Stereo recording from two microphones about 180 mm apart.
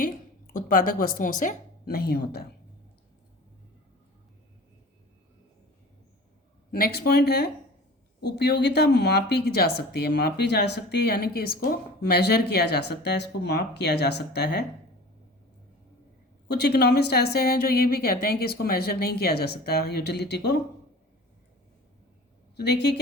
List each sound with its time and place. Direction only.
0.5 s a woman's voice: 50° left (ahead or behind)
6.7 s speech: 60° left (ahead or behind)
16.5 s speech: 65° left (ahead or behind)
22.5 s speech: 65° left (ahead or behind)